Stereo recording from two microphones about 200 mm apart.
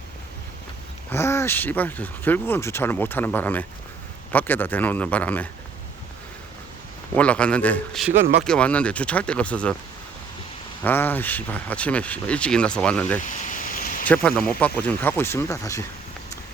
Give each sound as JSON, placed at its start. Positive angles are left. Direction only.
{"t": 1.1, "sound": "speech", "side_deg": 10}
{"t": 7.2, "sound": "speech", "side_deg": 5}
{"t": 10.8, "sound": "speech", "side_deg": 10}
{"t": 13.2, "sound": "vehicle", "side_deg": 40}
{"t": 14.1, "sound": "speech", "side_deg": 5}